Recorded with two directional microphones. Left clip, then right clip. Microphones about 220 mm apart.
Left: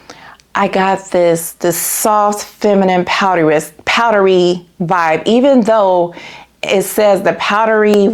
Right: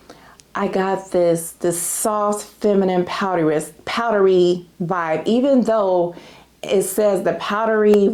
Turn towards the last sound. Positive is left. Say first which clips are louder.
# left 7 dB
turn(degrees=25)  # may be behind; listen again after turning